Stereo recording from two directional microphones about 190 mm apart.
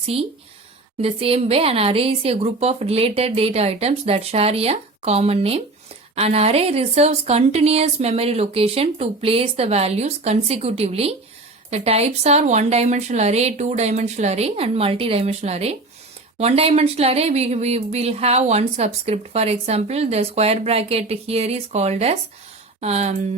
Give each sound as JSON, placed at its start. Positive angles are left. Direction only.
{"t": 0.0, "sound": "speech", "side_deg": -30}